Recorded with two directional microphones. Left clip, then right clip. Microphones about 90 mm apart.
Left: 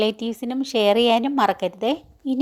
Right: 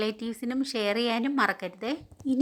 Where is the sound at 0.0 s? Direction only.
45° left (ahead or behind).